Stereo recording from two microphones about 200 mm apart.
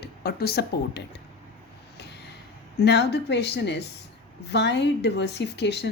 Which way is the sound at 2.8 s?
55° left (ahead or behind).